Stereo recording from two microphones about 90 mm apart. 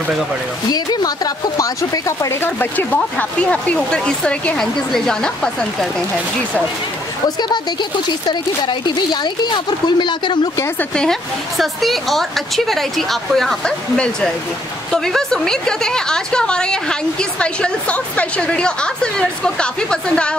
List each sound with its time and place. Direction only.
0.7 s speech: 50° left (ahead or behind)
2.4 s a woman's voice: 20° left (ahead or behind)
7.3 s speech: 55° left (ahead or behind)
10.8 s a woman's voice: 10° left (ahead or behind)